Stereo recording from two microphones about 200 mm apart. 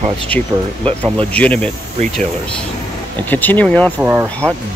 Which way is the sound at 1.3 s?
5° left (ahead or behind).